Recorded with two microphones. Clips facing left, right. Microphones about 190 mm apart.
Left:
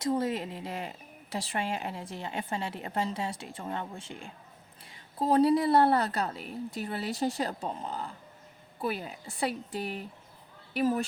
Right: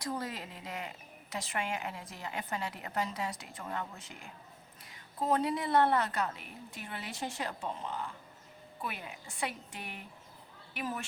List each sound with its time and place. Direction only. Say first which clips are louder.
0.0 s a woman's voice: left 9 dB; 25° left (ahead or behind)